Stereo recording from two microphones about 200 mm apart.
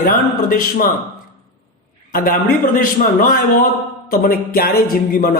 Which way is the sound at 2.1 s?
45° left (ahead or behind).